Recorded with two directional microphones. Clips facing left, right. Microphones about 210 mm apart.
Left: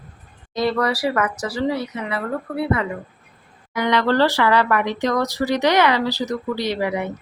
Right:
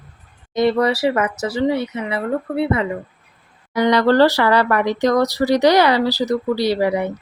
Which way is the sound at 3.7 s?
35° right (ahead or behind).